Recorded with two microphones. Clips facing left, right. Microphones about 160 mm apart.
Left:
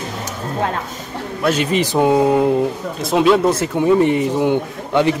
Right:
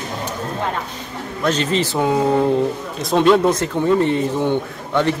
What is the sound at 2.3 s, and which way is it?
Speech, 10° left (ahead or behind).